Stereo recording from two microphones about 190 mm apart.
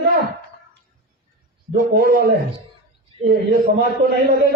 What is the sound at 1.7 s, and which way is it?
A man's voice, 50° right (ahead or behind).